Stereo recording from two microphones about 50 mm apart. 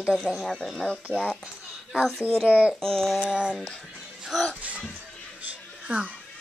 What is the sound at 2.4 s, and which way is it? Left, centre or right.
Speech, right.